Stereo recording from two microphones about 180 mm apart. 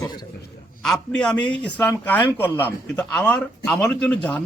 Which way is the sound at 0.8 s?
5° left (ahead or behind).